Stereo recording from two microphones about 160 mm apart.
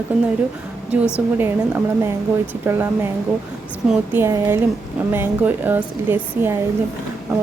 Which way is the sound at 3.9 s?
15° right (ahead or behind).